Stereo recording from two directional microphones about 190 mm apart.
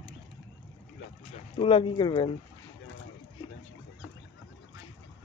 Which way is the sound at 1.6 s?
30° left (ahead or behind).